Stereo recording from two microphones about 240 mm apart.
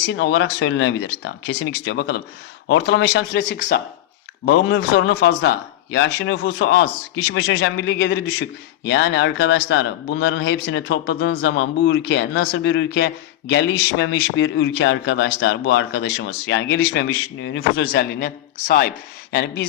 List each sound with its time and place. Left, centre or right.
0.2 s a man's voice: left
4.4 s a man's voice: left
19.3 s a man's voice: left